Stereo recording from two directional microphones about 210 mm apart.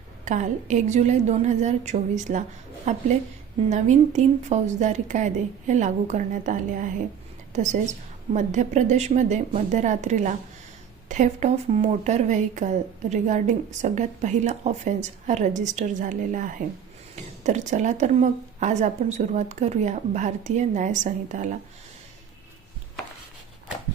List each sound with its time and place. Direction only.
0.3 s a woman's voice: 35° right (ahead or behind)